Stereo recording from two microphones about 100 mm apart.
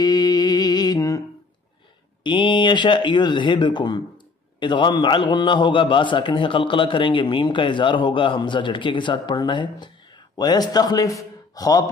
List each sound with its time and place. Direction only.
0.0 s music: 40° left (ahead or behind)
2.2 s a man's voice: 55° left (ahead or behind); by 11.8 s 35° left (ahead or behind)